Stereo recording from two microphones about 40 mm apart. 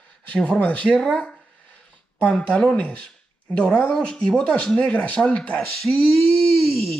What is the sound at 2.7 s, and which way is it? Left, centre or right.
Speech, left.